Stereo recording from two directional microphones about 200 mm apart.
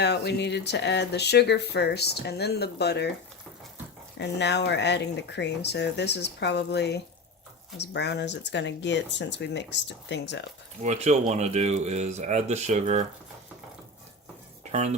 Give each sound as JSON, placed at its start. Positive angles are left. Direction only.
{"t": 0.0, "sound": "speech", "side_deg": 60}
{"t": 4.2, "sound": "speech", "side_deg": 60}
{"t": 10.8, "sound": "speech", "side_deg": -35}
{"t": 14.6, "sound": "stir", "side_deg": -35}